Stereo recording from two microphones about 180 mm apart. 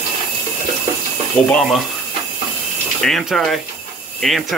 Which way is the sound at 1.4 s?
5° left (ahead or behind).